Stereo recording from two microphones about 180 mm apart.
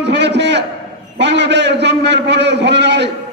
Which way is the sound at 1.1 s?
75° right (ahead or behind).